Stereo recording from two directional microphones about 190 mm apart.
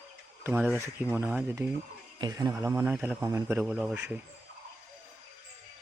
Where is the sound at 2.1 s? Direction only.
20° right (ahead or behind).